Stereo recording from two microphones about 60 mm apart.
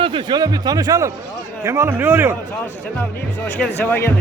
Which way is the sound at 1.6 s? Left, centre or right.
Right.